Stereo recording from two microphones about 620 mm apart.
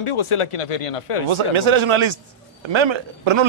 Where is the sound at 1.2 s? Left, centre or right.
Right.